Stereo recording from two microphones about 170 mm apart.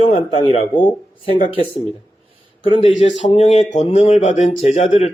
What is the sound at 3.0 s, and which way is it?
Speech, 40° left (ahead or behind).